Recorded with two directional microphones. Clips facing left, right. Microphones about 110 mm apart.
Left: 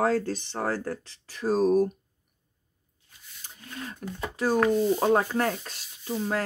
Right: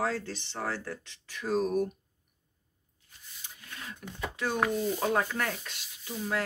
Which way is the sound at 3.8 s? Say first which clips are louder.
Left 4 dB; 35° left (ahead or behind).